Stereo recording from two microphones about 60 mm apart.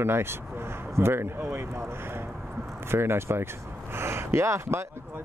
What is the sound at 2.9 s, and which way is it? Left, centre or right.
Speech, right.